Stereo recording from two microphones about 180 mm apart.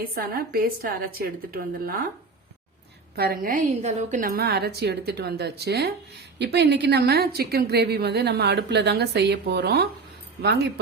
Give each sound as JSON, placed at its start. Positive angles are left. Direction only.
{"t": 0.1, "sound": "a woman's voice", "side_deg": -55}
{"t": 3.2, "sound": "a woman's voice", "side_deg": -55}